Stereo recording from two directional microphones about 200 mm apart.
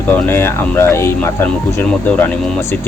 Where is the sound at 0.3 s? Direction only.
10° left (ahead or behind).